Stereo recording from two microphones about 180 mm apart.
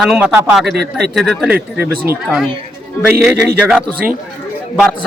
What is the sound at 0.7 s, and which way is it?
Speech, 65° right (ahead or behind).